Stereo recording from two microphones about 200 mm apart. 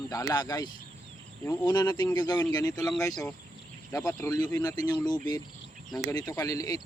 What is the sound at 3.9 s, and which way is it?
Speech, 15° left (ahead or behind).